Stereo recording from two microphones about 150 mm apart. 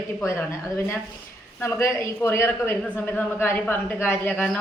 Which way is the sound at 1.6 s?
15° left (ahead or behind).